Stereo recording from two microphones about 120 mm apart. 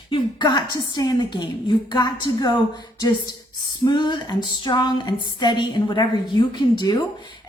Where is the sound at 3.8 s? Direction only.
40° left (ahead or behind).